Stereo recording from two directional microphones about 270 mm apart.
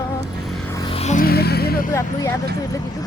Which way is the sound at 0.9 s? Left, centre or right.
Left.